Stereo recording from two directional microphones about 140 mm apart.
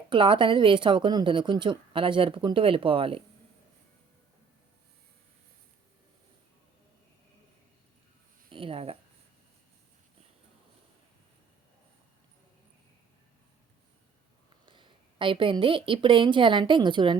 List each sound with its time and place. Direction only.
0.1 s a woman's voice: 35° right (ahead or behind)
8.4 s speech: 40° right (ahead or behind)
14.7 s a woman's voice: 35° right (ahead or behind)